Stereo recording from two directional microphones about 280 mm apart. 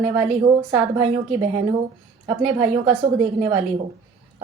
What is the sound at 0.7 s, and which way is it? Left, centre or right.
A woman's voice, right.